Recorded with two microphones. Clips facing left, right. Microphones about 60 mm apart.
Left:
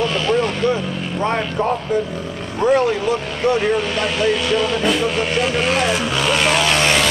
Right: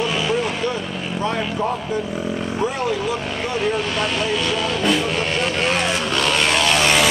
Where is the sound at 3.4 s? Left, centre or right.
Centre.